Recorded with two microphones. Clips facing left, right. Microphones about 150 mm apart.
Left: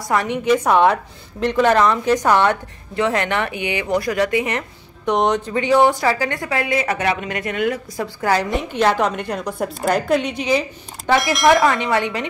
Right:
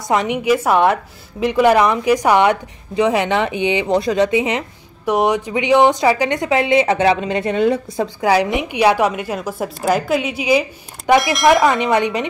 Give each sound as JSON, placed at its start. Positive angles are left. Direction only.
{"t": 0.1, "sound": "a woman's voice", "side_deg": -15}
{"t": 8.2, "sound": "a woman's voice", "side_deg": -15}
{"t": 11.6, "sound": "a woman's voice", "side_deg": -20}